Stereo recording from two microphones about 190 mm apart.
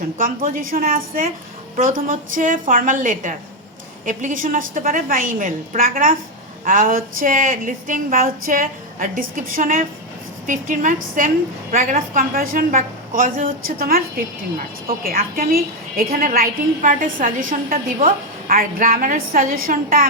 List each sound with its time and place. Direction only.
0.2 s speech: 45° right (ahead or behind)